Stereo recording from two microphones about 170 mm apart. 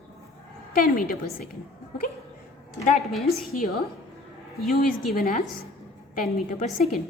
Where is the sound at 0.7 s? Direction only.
60° left (ahead or behind).